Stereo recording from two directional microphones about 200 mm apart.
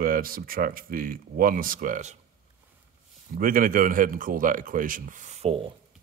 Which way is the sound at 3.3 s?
45° right (ahead or behind).